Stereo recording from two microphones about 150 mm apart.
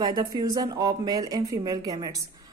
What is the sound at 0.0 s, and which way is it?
Speech, 25° right (ahead or behind).